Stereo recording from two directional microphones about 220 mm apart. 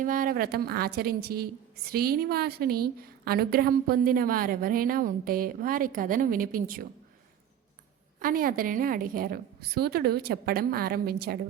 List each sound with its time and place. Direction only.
0.0 s a woman's voice: 40° right (ahead or behind)
8.2 s a woman's voice: 40° right (ahead or behind)